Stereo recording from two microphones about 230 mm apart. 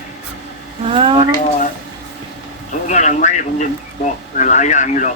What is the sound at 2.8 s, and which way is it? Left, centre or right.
Speech, left.